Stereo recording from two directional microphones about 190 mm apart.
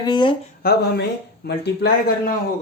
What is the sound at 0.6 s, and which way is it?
A man's voice, 55° left (ahead or behind).